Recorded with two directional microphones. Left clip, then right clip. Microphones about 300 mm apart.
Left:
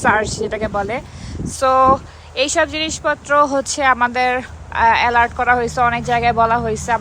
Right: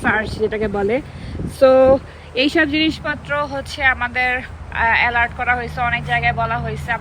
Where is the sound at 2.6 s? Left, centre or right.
Centre.